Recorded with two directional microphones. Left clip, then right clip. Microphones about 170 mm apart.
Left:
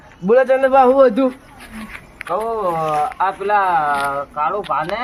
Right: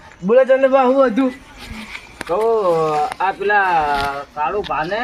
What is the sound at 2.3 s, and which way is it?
Speech, 15° left (ahead or behind).